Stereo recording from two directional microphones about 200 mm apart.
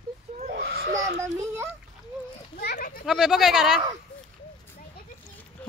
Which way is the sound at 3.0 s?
Centre (ahead or behind).